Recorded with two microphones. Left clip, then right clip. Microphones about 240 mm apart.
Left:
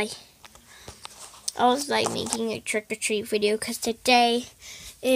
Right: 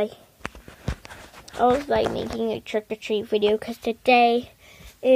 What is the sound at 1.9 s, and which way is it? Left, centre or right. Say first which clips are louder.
Speech: right 2 dB; centre.